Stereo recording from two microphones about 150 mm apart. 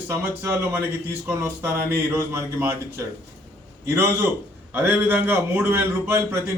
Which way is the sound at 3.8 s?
15° right (ahead or behind).